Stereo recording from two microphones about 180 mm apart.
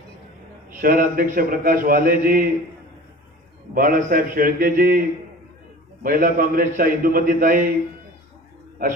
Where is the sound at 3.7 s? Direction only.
50° right (ahead or behind).